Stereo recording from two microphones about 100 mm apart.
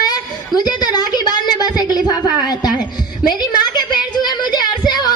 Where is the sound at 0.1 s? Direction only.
40° left (ahead or behind).